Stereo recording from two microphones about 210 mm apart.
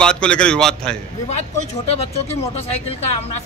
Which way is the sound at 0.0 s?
5° left (ahead or behind).